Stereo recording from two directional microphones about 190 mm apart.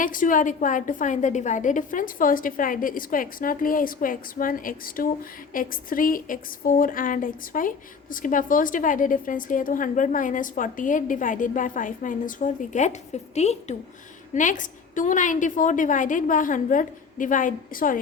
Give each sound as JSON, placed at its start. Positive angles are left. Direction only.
{"t": 0.0, "sound": "a woman's voice", "side_deg": 45}